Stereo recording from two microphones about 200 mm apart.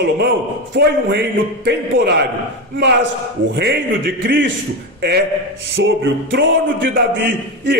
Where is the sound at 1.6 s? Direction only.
55° right (ahead or behind).